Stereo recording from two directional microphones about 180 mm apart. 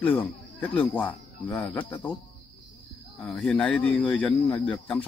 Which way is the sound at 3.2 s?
5° left (ahead or behind).